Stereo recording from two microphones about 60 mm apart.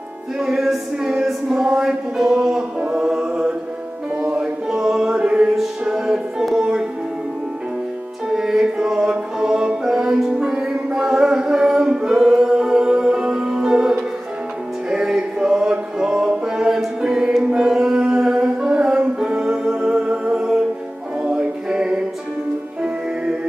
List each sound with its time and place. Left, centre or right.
0.4 s a sound: centre
4.4 s chant: centre
5.6 s music: centre
8.3 s music: centre